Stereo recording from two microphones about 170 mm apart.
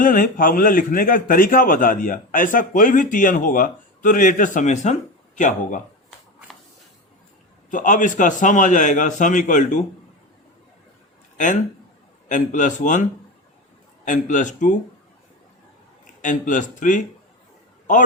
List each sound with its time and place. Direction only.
0.0 s a man's voice: 55° left (ahead or behind)
7.7 s a man's voice: 50° left (ahead or behind)
12.3 s a man's voice: 50° left (ahead or behind)
16.2 s a man's voice: 50° left (ahead or behind)